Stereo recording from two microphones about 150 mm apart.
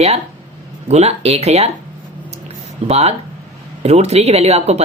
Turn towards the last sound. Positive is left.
turn(degrees=-45)  # may be behind; listen again after turning